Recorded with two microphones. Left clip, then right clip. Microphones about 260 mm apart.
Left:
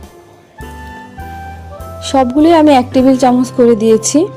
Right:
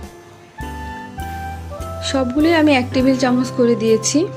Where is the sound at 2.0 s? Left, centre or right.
Left.